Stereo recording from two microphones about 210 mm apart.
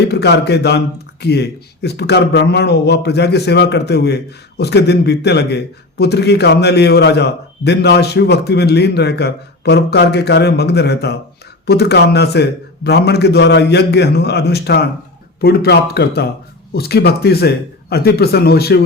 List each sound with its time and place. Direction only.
0.0 s a man's voice: 55° left (ahead or behind)